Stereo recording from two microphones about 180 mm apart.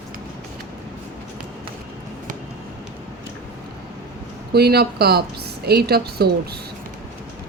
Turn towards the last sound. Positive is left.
turn(degrees=-60)  # may be behind; listen again after turning